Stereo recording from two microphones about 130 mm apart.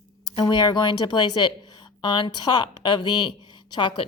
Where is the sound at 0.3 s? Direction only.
35° left (ahead or behind).